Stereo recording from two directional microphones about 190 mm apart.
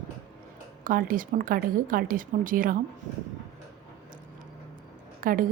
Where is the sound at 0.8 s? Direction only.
45° right (ahead or behind).